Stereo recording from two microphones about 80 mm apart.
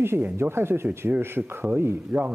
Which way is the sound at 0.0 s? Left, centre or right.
Right.